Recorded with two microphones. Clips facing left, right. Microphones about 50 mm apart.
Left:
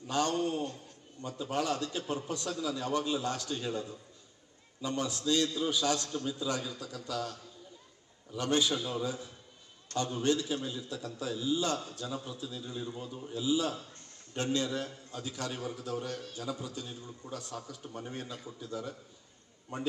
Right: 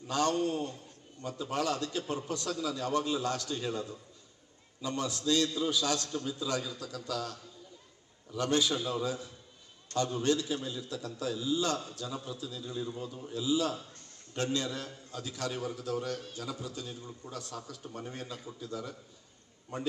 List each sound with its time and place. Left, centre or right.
0.1 s a man's voice: left
4.8 s a man's voice: left
8.7 s a man's voice: right
9.0 s a man's voice: left